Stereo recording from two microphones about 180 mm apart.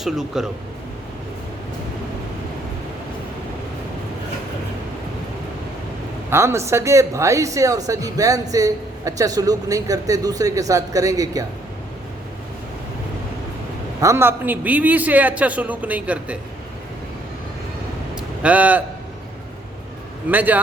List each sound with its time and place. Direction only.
0.0 s speech: centre (ahead or behind)
6.3 s a man's voice: 15° right (ahead or behind)
14.0 s a man's voice: 15° right (ahead or behind)
18.1 s vehicle: 5° right (ahead or behind)
20.3 s a man's voice: 10° right (ahead or behind)